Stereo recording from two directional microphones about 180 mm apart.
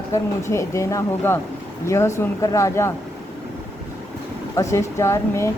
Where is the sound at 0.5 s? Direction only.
15° left (ahead or behind).